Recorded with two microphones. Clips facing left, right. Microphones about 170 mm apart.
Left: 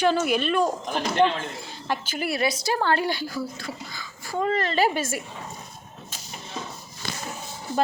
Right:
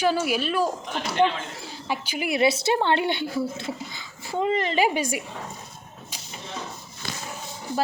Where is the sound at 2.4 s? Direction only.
25° right (ahead or behind).